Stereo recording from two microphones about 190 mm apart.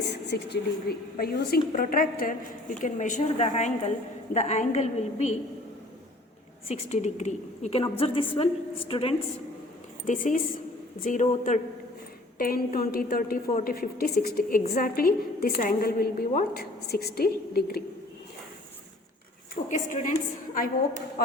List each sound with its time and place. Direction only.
0.0 s a woman's voice: 60° left (ahead or behind); by 5.3 s 35° left (ahead or behind)
6.7 s a woman's voice: 35° left (ahead or behind)
10.1 s a woman's voice: 45° left (ahead or behind)
19.6 s a woman's voice: 40° left (ahead or behind)